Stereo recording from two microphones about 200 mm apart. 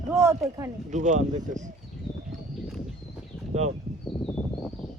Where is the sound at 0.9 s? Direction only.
40° right (ahead or behind).